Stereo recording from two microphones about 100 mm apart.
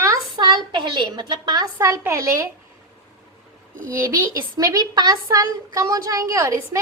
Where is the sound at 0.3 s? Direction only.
45° right (ahead or behind); by 2.5 s 30° right (ahead or behind).